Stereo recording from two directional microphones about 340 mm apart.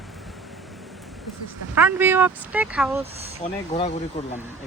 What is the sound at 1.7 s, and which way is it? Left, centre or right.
Speech, centre.